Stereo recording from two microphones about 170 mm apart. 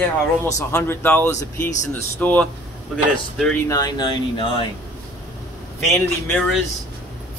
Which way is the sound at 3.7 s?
20° left (ahead or behind).